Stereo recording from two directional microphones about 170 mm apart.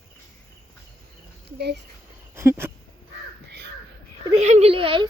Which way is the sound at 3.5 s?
80° right.